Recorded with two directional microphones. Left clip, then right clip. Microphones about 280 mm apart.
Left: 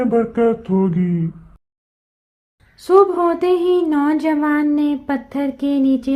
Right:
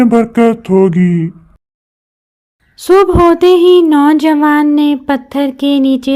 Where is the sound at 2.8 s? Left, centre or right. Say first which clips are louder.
Right 6 dB; right.